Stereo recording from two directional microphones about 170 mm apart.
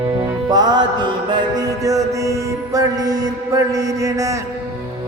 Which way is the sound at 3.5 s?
20° right (ahead or behind).